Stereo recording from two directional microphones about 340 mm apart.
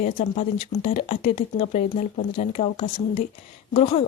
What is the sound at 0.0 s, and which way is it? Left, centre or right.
Speech, left.